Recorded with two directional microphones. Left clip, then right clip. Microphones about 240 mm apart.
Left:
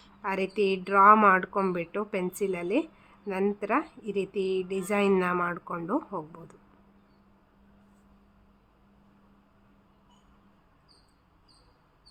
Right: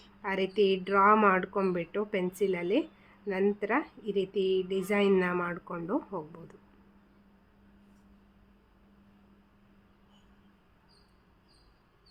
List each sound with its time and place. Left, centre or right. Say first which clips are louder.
0.0 s a woman's voice: left 1 dB; centre